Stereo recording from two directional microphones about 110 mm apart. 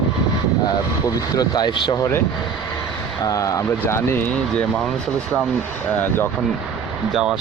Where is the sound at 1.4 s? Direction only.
40° left (ahead or behind).